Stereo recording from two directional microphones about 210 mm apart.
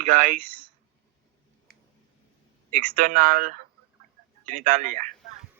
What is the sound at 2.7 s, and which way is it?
Speech, 35° right (ahead or behind).